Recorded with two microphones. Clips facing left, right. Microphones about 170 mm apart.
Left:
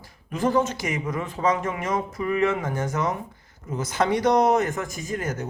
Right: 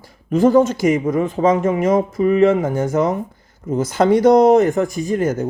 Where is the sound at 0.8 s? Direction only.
30° right (ahead or behind).